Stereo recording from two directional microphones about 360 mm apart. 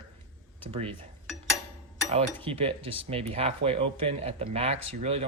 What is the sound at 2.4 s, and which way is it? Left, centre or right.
Speech, centre.